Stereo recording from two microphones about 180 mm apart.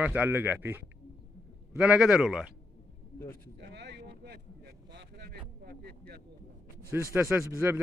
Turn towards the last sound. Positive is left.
turn(degrees=-10)  # may be behind; listen again after turning